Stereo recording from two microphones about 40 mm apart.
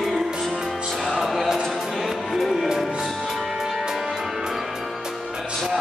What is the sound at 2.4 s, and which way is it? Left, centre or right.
Music, centre.